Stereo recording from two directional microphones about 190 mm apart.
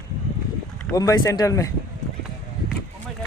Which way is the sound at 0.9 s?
20° left (ahead or behind).